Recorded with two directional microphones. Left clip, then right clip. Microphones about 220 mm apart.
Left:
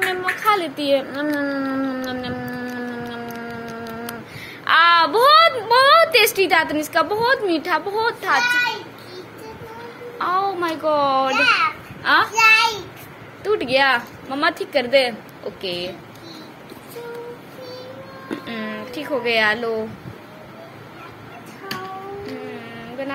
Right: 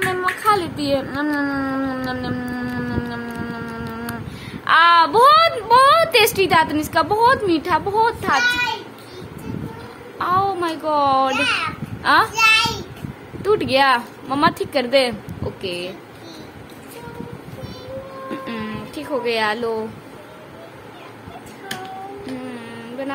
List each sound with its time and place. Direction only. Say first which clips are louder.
0.0 s child singing: right 1 dB; 15° right (ahead or behind)
4.6 s a woman's voice: right 1 dB; 10° right (ahead or behind)
10.1 s a woman's voice: right 2 dB; 10° right (ahead or behind)
12.0 s a child's voice: even; 20° right (ahead or behind)
15.6 s a woman's voice: left 1 dB; 10° right (ahead or behind)
18.4 s music: even; 15° right (ahead or behind)